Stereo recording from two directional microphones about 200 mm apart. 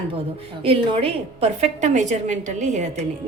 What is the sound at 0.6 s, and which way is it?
A woman's voice, 25° right (ahead or behind).